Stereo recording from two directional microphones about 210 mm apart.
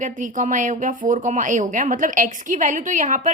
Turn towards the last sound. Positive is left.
turn(degrees=-35)  # may be behind; listen again after turning